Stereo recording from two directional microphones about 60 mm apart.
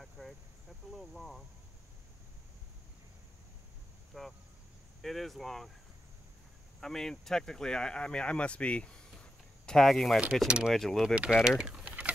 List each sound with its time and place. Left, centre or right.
0.9 s speech: centre
4.1 s speech: centre
6.8 s speech: centre
9.2 s a sound: centre
10.4 s speech: centre
10.7 s speech: centre
11.4 s speech: centre